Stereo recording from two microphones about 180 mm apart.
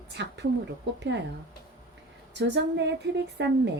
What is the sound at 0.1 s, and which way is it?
Speech, 70° right (ahead or behind).